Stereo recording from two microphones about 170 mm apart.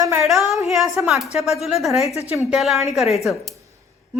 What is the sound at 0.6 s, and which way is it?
A woman's voice, centre (ahead or behind).